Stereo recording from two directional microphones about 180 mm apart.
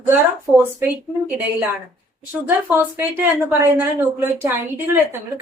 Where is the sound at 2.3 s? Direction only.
10° right (ahead or behind).